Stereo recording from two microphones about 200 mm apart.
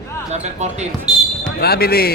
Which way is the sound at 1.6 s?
50° left (ahead or behind).